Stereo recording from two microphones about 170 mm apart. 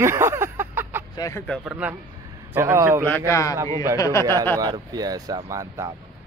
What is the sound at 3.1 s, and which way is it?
Speech, 15° left (ahead or behind).